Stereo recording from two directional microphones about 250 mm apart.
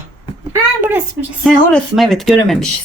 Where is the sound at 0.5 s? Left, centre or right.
Centre.